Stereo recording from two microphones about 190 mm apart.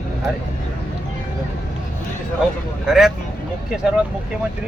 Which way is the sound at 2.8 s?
Centre (ahead or behind).